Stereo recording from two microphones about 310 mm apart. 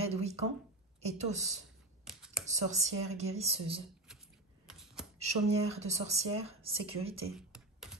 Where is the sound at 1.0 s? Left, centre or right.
Right.